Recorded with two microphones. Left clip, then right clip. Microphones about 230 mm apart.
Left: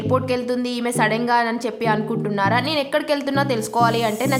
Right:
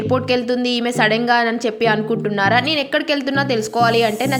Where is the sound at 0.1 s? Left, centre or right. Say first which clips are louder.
Right 2 dB; centre.